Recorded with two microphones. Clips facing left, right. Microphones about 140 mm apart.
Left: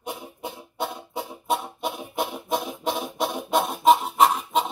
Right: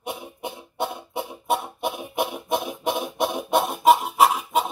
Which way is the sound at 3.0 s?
Centre (ahead or behind).